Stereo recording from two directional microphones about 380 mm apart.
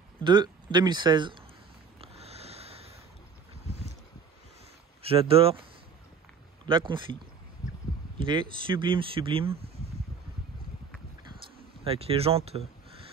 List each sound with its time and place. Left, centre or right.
0.2 s speech: centre
2.0 s a sound: centre
5.1 s speech: centre
6.7 s speech: centre
8.2 s speech: centre
11.8 s speech: centre